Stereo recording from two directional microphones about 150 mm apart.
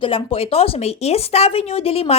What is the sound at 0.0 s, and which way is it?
A woman's voice, 35° left (ahead or behind).